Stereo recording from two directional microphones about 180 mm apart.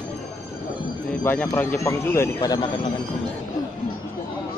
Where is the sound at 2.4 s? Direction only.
25° left (ahead or behind).